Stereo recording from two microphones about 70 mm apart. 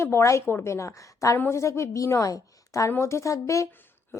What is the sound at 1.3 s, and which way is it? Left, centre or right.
A woman's voice, left.